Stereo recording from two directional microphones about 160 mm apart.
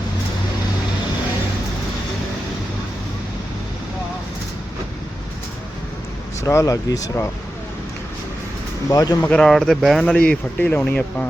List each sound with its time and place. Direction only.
6.4 s speech: 20° left (ahead or behind)
8.9 s speech: 20° left (ahead or behind)
9.3 s speech: centre (ahead or behind)